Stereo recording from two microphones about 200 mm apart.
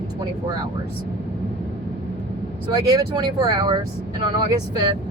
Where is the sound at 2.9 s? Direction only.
20° right (ahead or behind).